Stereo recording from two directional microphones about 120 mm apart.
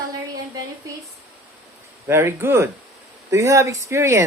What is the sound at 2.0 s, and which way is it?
Speech, 20° right (ahead or behind).